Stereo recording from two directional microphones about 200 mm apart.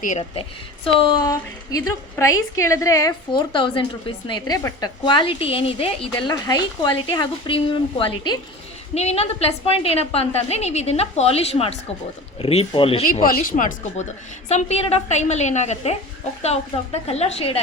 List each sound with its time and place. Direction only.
0.0 s a woman's voice: 35° left (ahead or behind)
0.9 s a woman's voice: 25° left (ahead or behind)
13.1 s a woman's voice: 45° left (ahead or behind)